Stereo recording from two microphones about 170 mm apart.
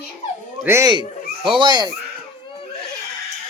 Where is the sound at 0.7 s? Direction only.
15° right (ahead or behind).